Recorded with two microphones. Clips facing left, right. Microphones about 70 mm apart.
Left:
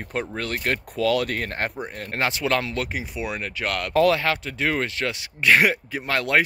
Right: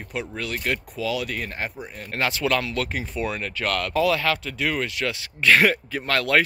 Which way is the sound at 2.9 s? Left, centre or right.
Centre.